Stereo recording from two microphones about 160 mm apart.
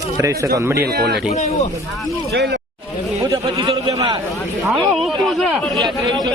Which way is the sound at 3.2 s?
20° right (ahead or behind).